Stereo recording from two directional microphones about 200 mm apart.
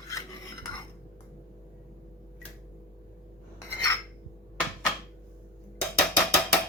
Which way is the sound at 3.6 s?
15° left (ahead or behind).